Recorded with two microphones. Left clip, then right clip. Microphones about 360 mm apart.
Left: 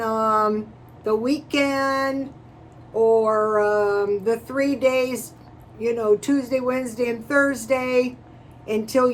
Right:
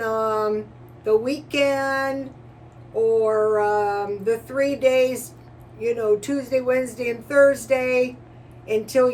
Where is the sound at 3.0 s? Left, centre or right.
Left.